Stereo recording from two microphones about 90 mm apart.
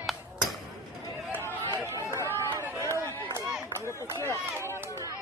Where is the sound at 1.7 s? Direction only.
35° left (ahead or behind).